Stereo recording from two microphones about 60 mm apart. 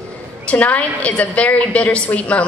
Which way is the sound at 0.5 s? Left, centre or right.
Left.